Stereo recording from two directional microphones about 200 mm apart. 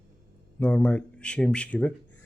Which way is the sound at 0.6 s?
5° left (ahead or behind).